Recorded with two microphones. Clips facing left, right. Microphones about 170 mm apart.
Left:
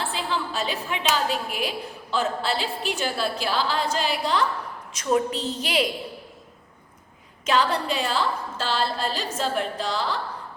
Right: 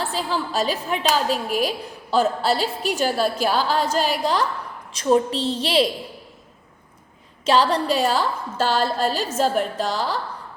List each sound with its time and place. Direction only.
0.0 s a woman's voice: 40° right (ahead or behind)
4.9 s a woman's voice: 30° right (ahead or behind)
7.4 s a woman's voice: 35° right (ahead or behind)